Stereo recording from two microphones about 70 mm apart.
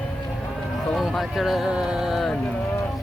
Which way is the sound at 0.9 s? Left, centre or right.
Centre.